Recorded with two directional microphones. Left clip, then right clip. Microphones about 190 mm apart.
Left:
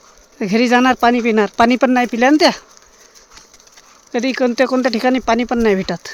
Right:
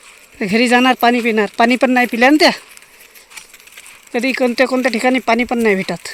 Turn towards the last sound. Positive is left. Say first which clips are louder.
# even
turn(degrees=0)  # may be behind; listen again after turning